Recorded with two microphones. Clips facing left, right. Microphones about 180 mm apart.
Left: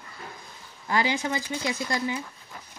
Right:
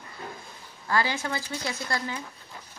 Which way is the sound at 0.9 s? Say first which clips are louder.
Left 2 dB; 15° left (ahead or behind).